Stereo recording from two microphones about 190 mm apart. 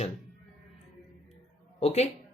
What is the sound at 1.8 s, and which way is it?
Speech, 35° left (ahead or behind).